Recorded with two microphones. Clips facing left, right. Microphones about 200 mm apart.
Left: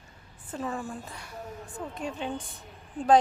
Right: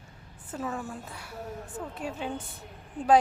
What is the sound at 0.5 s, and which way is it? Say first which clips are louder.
A woman's voice: left 1 dB; 5° right (ahead or behind).